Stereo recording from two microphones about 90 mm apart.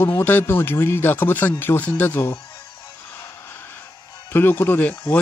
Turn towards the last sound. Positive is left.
turn(degrees=20)  # may be behind; listen again after turning